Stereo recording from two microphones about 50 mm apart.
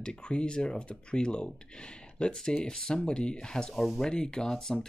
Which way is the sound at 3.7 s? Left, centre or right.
Centre.